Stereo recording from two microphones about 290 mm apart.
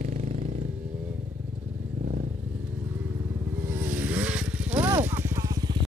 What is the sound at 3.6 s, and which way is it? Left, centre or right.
Motorcycle, centre.